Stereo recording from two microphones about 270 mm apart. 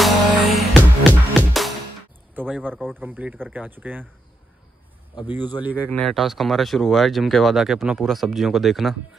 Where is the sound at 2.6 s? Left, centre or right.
Centre.